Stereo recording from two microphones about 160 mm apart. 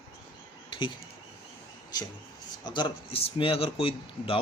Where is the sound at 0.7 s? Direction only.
30° left (ahead or behind).